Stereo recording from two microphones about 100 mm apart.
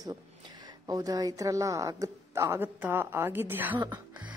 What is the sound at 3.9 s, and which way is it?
Music, 15° right (ahead or behind).